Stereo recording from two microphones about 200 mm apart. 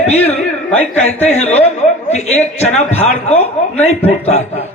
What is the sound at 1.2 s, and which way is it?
A man's voice, 35° left (ahead or behind).